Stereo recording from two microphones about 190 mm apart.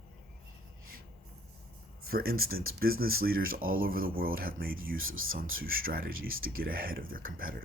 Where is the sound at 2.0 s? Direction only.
50° right (ahead or behind).